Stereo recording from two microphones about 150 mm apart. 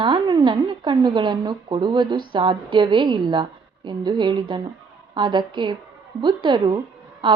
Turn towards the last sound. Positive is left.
turn(degrees=-35)  # may be behind; listen again after turning